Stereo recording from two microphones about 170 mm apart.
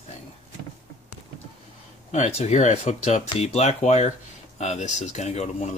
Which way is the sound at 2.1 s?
40° left (ahead or behind).